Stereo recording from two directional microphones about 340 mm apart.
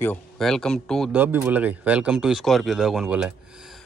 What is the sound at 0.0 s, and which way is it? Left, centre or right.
Speech, centre.